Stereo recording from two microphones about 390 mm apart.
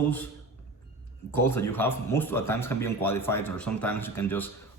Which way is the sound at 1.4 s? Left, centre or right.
Left.